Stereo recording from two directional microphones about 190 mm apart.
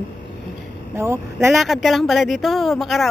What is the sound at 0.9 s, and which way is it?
Speech, 15° right (ahead or behind).